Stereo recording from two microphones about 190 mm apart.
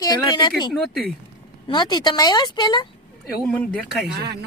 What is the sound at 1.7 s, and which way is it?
Speech, 25° left (ahead or behind).